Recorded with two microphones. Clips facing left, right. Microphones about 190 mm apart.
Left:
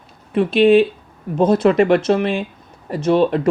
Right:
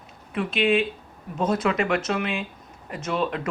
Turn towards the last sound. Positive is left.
turn(degrees=30)  # may be behind; listen again after turning